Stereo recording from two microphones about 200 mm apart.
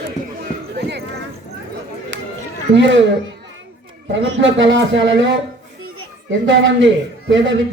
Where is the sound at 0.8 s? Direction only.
55° right (ahead or behind).